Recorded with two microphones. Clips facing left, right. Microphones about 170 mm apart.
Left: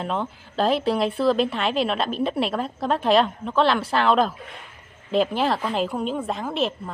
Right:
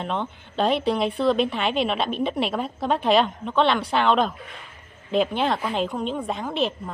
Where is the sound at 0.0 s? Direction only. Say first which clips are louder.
Left 1 dB; centre (ahead or behind).